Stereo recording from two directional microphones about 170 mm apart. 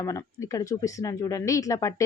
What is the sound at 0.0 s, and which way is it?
A woman's voice, 20° left (ahead or behind).